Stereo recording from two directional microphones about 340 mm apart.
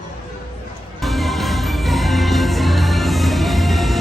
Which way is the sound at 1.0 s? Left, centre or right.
Centre.